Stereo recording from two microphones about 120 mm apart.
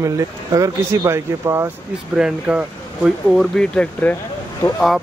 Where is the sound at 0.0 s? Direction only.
25° right (ahead or behind).